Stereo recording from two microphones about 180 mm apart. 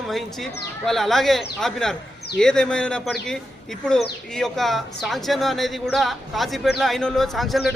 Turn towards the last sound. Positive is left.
turn(degrees=0)  # may be behind; listen again after turning